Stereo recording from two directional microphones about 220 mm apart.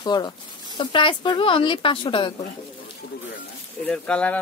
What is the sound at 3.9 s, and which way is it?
Speech, 5° left (ahead or behind).